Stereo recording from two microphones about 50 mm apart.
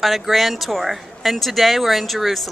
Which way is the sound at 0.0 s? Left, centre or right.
Centre.